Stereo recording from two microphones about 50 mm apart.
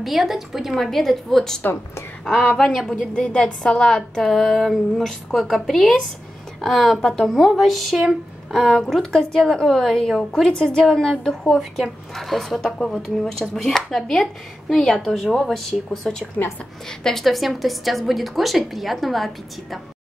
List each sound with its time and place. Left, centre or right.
0.0 s a woman's voice: centre
0.7 s speech: centre
1.6 s speech: left
2.7 s a woman's voice: centre
3.0 s speech: centre
4.2 s a woman's voice: centre
8.5 s speech: centre
11.4 s a woman's voice: centre